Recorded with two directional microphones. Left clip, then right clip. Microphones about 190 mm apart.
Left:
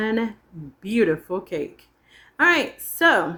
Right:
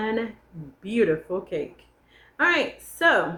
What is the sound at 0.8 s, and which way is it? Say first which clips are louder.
A woman's voice: left 1 dB; 45° left (ahead or behind).